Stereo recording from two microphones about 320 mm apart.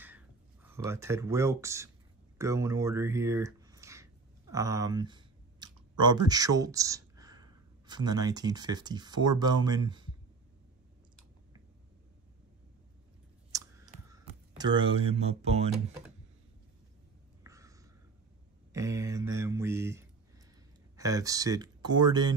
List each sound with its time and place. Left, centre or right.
0.0 s a sound: centre
2.3 s speech: centre
13.5 s clicking: centre
14.1 s speech: centre
17.4 s whispering: centre
18.7 s speech: centre